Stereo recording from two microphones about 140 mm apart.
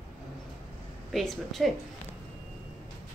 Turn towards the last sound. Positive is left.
turn(degrees=0)  # may be behind; listen again after turning